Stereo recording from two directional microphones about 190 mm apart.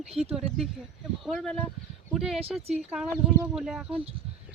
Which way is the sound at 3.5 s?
Centre (ahead or behind).